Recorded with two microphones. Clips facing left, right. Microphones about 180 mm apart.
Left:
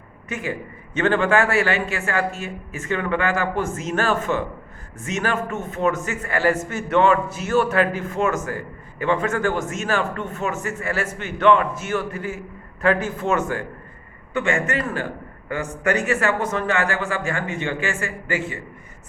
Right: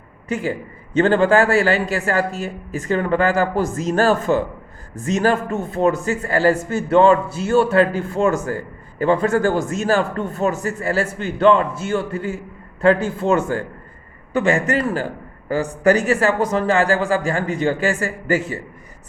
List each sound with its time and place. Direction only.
0.3 s a man's voice: 30° right (ahead or behind)